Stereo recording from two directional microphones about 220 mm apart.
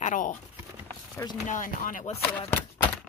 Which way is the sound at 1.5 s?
35° left (ahead or behind).